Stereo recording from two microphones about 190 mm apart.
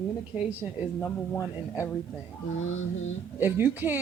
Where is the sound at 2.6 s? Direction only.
90° left.